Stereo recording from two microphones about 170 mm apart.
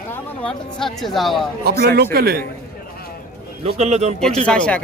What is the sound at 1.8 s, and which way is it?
Speech, 65° right (ahead or behind).